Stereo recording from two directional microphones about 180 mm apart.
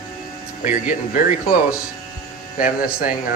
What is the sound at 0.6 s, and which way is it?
Speech, 45° left (ahead or behind).